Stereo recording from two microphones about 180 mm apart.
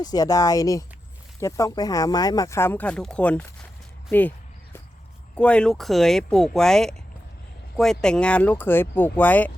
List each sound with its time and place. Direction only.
0.0 s speech: 20° left (ahead or behind)
5.3 s speech: 5° left (ahead or behind)